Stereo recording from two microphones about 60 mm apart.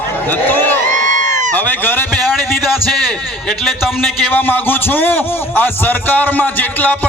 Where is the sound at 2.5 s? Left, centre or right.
Centre.